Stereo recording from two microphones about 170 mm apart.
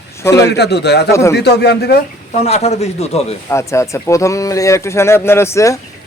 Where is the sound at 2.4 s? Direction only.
40° left (ahead or behind).